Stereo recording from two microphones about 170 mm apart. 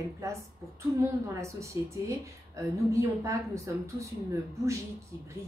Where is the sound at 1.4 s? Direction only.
15° right (ahead or behind).